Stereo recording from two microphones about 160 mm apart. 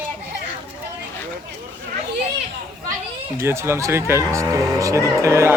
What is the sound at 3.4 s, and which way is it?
Speech, 15° right (ahead or behind).